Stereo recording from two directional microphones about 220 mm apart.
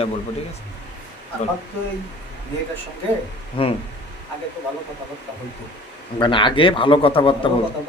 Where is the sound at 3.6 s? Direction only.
25° left (ahead or behind).